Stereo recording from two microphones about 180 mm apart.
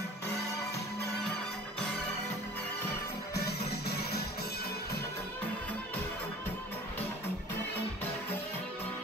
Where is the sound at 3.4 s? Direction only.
60° left (ahead or behind).